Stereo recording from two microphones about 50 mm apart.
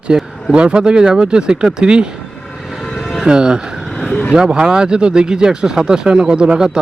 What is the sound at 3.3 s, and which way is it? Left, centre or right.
Speech, centre.